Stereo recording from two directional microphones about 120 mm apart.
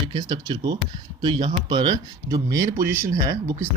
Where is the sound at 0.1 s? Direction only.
35° right (ahead or behind).